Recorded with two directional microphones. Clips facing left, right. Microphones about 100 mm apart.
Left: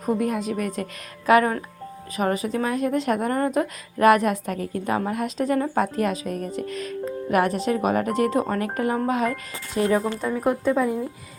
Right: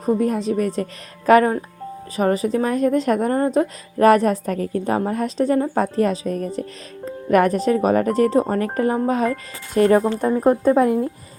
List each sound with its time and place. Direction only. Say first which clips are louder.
0.0 s speech: right 4 dB; 35° right (ahead or behind)
7.3 s speech: right 6 dB; 45° right (ahead or behind)
9.7 s speech: right 6 dB; 55° right (ahead or behind)